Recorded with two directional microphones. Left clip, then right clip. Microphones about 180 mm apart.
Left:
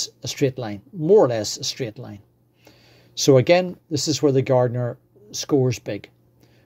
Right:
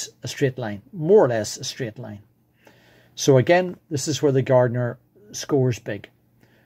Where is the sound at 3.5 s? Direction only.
15° left (ahead or behind).